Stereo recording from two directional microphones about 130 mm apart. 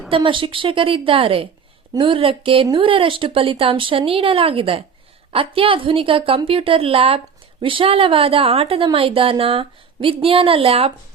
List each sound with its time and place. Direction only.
0.1 s a woman's voice: 40° right (ahead or behind)